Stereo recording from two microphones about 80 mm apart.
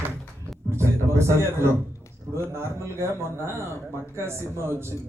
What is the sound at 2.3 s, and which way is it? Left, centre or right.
A man's voice, right.